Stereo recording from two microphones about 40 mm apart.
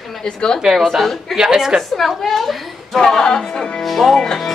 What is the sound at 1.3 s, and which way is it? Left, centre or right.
Speech, centre.